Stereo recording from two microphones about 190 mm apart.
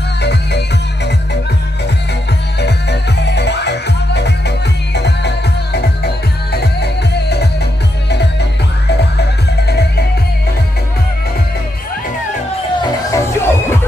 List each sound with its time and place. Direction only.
0.2 s music: 60° left (ahead or behind)
2.6 s music: 65° left (ahead or behind)
13.1 s music: 10° left (ahead or behind)